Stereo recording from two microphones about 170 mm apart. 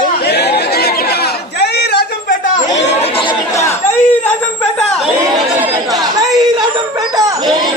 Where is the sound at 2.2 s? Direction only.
50° left (ahead or behind).